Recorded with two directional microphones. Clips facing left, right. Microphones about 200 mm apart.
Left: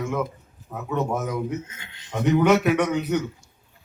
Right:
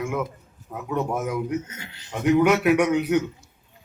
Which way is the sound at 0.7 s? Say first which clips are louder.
Even; 5° right (ahead or behind).